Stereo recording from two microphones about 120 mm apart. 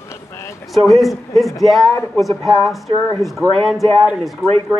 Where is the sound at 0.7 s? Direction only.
Centre (ahead or behind).